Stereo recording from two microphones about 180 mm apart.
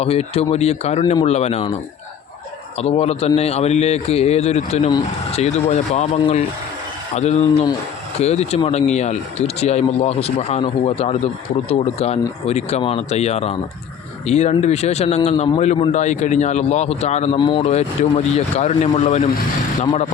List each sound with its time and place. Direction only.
0.0 s a man's voice: 35° left (ahead or behind)
2.7 s a man's voice: 35° left (ahead or behind)
19.8 s speech: 25° left (ahead or behind)